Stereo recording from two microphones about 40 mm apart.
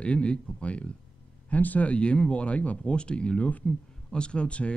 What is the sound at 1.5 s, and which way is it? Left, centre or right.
Speech, left.